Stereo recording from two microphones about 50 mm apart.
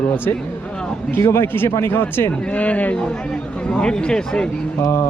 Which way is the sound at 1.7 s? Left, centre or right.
Left.